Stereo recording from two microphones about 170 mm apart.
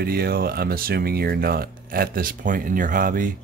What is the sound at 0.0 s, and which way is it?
Speech, 65° right (ahead or behind).